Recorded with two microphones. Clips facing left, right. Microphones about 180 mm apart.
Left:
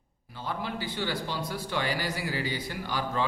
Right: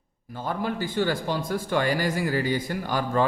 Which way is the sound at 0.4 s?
45° right (ahead or behind).